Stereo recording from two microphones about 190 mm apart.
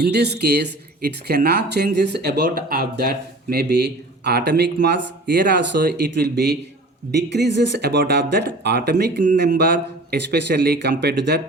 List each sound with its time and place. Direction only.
0.0 s speech: 60° right (ahead or behind)